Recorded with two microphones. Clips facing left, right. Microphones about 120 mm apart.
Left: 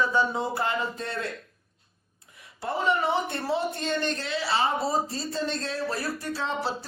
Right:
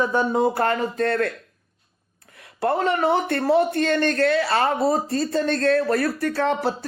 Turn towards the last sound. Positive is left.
turn(degrees=-55)  # may be behind; listen again after turning